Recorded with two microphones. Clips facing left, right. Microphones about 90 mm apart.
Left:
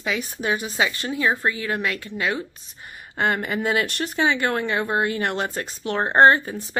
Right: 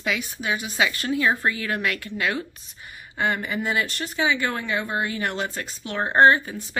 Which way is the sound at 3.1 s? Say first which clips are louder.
Left 2 dB; 45° left (ahead or behind).